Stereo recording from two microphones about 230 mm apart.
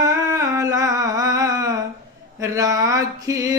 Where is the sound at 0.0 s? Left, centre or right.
Centre.